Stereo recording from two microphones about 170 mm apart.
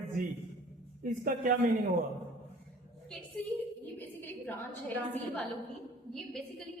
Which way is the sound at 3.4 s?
10° left (ahead or behind).